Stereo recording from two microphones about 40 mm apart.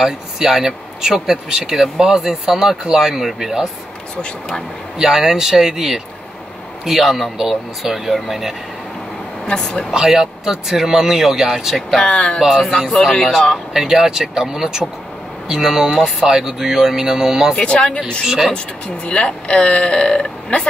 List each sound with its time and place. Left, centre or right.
0.0 s speech: centre
2.8 s a man's voice: centre
4.9 s a man's voice: centre
9.5 s speech: left
9.9 s speech: centre
12.0 s speech: left
12.4 s a man's voice: centre
13.7 s speech: centre
17.6 s speech: left
18.2 s speech: centre
19.0 s speech: left